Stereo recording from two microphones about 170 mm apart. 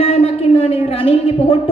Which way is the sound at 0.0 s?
35° left (ahead or behind).